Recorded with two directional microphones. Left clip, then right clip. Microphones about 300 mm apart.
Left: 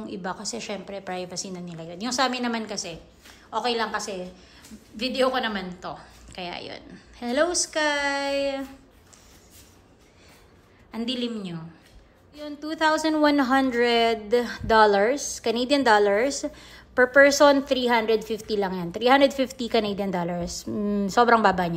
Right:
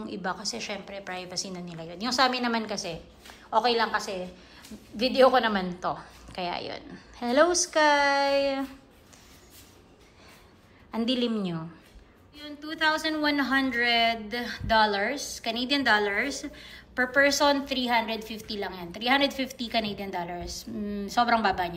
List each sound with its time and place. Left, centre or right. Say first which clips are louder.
0.0 s a woman's voice: even; centre
10.9 s a woman's voice: right 2 dB; centre
12.4 s a woman's voice: left 3 dB; centre
20.2 s a woman's voice: left 4 dB; left